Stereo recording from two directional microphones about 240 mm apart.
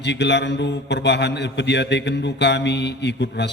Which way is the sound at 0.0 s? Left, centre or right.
Left.